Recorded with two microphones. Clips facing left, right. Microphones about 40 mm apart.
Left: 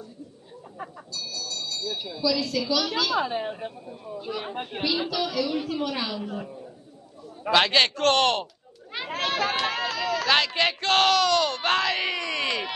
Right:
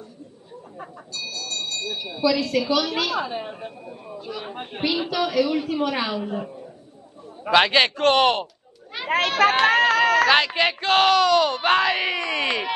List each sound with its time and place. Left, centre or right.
1.1 s bell: right
2.0 s speech: right
2.6 s a woman's voice: centre
3.3 s a woman's voice: centre
4.2 s a woman's voice: centre
5.1 s a woman's voice: right
9.4 s a sound: right
10.3 s speech: centre